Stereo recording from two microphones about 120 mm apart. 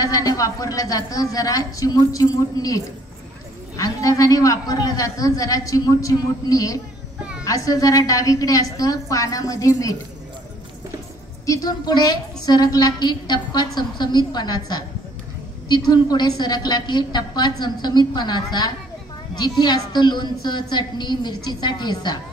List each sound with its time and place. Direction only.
0.0 s a man's voice: 30° left (ahead or behind)
7.2 s a sound: 5° right (ahead or behind)
7.4 s a man's voice: 30° left (ahead or behind)
11.4 s a woman's voice: 30° left (ahead or behind)